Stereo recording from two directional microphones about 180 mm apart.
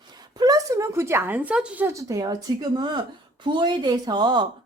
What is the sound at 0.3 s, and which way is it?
A woman's voice, 20° right (ahead or behind).